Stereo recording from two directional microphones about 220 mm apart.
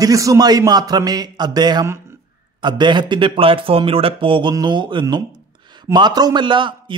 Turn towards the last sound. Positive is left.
turn(degrees=-20)  # may be behind; listen again after turning